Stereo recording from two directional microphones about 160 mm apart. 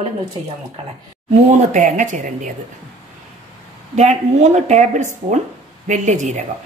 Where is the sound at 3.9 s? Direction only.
45° right (ahead or behind).